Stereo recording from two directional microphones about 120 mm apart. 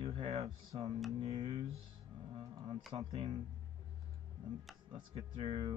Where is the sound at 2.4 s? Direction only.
45° right (ahead or behind).